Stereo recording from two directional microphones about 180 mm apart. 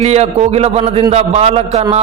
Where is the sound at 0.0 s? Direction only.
40° right (ahead or behind).